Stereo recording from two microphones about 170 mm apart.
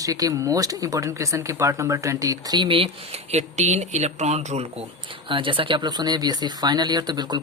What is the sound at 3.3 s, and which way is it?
Speech, 40° right (ahead or behind).